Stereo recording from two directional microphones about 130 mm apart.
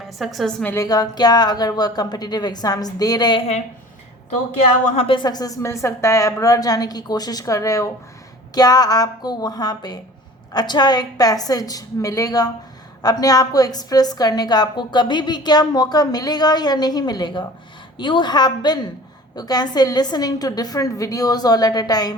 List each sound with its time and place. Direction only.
0.2 s a woman's voice: centre (ahead or behind)
0.6 s a woman's voice: 15° left (ahead or behind)
0.9 s a woman's voice: 30° left (ahead or behind)
4.9 s a woman's voice: 40° left (ahead or behind)